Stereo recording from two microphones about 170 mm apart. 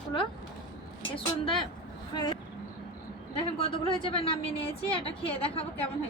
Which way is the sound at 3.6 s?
30° left (ahead or behind).